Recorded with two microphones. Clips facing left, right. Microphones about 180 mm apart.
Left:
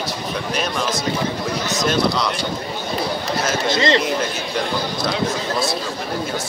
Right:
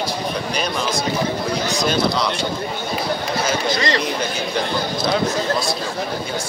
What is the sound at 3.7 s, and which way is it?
Speech, 25° left (ahead or behind).